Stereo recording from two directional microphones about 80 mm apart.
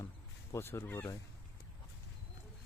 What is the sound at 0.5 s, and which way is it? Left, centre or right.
Speech, left.